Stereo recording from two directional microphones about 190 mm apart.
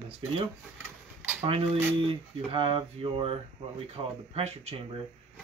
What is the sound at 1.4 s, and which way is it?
Speech, 30° right (ahead or behind).